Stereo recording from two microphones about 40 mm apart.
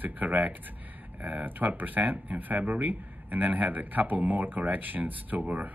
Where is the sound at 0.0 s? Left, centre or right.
Right.